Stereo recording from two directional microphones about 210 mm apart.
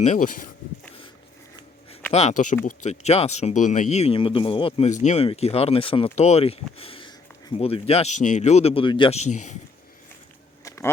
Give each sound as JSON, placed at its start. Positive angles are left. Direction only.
{"t": 0.0, "sound": "speech", "side_deg": 35}
{"t": 2.1, "sound": "speech", "side_deg": 35}
{"t": 10.6, "sound": "a sound", "side_deg": 15}